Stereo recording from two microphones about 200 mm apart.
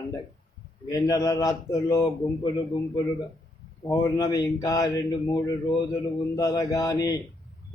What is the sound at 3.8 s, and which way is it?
Speech, 20° left (ahead or behind).